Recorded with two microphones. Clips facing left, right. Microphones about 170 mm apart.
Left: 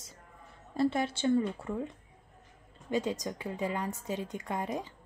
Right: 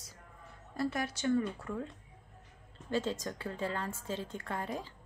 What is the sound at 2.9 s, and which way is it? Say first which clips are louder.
A woman's voice: left 2 dB; 15° left (ahead or behind).